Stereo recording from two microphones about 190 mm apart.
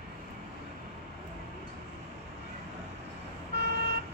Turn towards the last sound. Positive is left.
turn(degrees=-60)  # may be behind; listen again after turning